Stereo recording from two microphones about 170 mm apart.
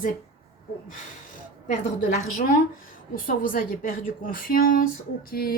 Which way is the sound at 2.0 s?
55° left (ahead or behind).